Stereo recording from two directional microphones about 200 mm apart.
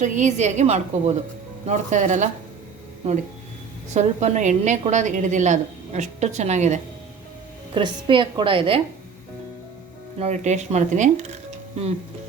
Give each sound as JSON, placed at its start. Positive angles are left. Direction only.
{"t": 0.0, "sound": "a woman's voice", "side_deg": -35}
{"t": 3.8, "sound": "a woman's voice", "side_deg": -35}
{"t": 7.7, "sound": "a woman's voice", "side_deg": -25}
{"t": 10.2, "sound": "a woman's voice", "side_deg": -35}